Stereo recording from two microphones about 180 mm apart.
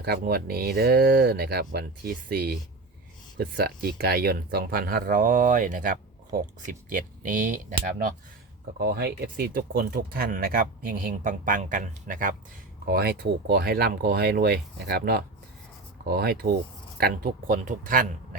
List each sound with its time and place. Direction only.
0.0 s speech: 60° right (ahead or behind)
8.8 s speech: 60° right (ahead or behind)
12.8 s speech: 60° right (ahead or behind)